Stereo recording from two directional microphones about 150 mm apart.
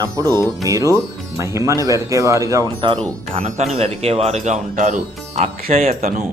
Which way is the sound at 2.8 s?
35° right (ahead or behind).